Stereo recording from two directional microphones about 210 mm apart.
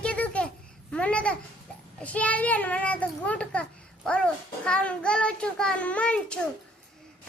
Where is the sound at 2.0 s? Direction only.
5° left (ahead or behind).